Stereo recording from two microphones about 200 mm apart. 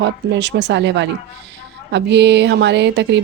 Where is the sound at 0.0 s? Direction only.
60° right (ahead or behind).